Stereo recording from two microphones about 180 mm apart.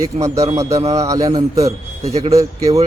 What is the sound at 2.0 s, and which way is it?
Speech, 35° right (ahead or behind).